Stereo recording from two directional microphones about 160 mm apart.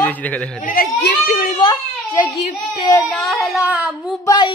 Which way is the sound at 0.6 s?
65° left (ahead or behind).